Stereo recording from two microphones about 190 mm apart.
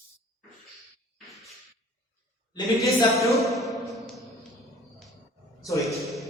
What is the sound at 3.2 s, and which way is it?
Music, centre (ahead or behind).